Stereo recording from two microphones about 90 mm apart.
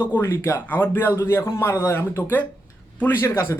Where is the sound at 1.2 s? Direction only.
35° left (ahead or behind).